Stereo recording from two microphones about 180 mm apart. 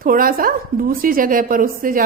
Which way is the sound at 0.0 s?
55° right (ahead or behind).